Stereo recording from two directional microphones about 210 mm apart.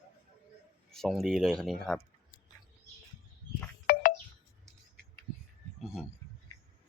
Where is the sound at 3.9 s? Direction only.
40° left (ahead or behind).